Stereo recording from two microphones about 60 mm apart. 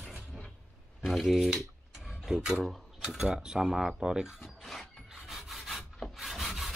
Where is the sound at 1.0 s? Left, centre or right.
Centre.